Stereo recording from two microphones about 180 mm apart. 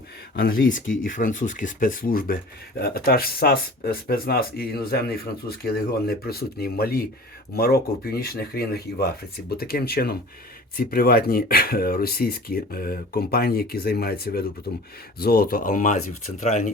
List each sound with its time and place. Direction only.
0.3 s speech: 55° left (ahead or behind)